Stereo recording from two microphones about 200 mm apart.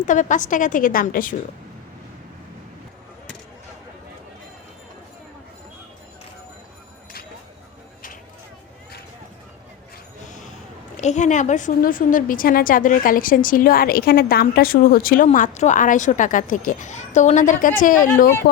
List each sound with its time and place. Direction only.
0.0 s a woman's voice: 40° left (ahead or behind)
10.2 s a sound: 40° left (ahead or behind)
10.9 s a woman's voice: 35° left (ahead or behind)